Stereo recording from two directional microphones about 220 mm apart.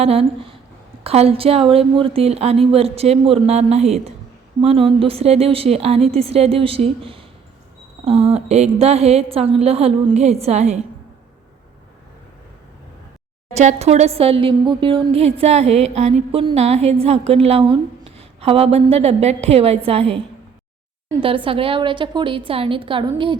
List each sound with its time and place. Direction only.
0.0 s a woman's voice: 25° right (ahead or behind)
13.5 s a woman's voice: 30° right (ahead or behind)